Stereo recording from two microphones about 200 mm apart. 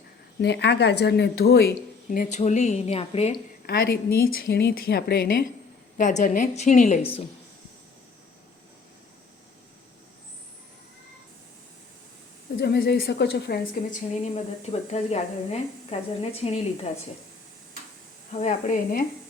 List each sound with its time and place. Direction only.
0.4 s speech: 60° left (ahead or behind)
2.0 s a woman's voice: 40° left (ahead or behind)
3.7 s a woman's voice: 50° left (ahead or behind)
6.0 s a woman's voice: 40° left (ahead or behind)
12.5 s a woman's voice: 55° left (ahead or behind)
13.9 s a woman's voice: 35° left (ahead or behind)
18.3 s a woman's voice: 35° left (ahead or behind)